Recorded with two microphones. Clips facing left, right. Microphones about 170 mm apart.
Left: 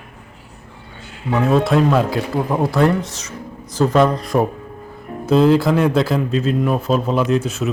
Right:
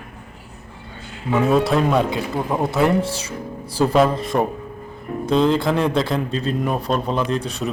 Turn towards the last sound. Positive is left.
turn(degrees=5)  # may be behind; listen again after turning